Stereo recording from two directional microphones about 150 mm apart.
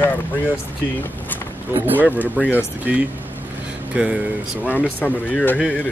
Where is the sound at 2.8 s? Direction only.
10° right (ahead or behind).